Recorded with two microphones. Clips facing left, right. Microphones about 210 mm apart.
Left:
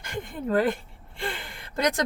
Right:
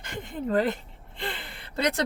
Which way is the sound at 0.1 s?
45° left (ahead or behind).